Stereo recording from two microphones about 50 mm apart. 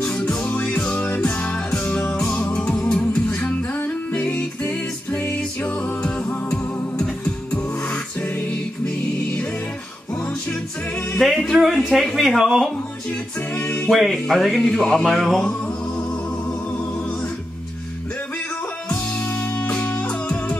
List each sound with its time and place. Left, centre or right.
0.0 s music: centre; by 1.2 s left
1.2 s music: left
6.5 s music: left
11.1 s music: centre
11.5 s speech: centre
13.8 s speech: centre
14.7 s speech: centre
19.4 s music: left